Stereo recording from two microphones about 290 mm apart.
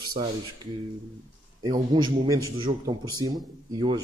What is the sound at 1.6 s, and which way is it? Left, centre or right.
A man's voice, centre.